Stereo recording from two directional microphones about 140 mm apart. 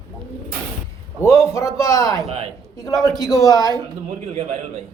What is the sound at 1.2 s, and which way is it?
Speech, 20° left (ahead or behind).